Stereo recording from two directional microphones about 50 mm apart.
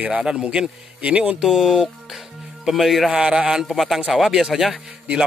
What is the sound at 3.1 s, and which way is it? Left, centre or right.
Speech, centre.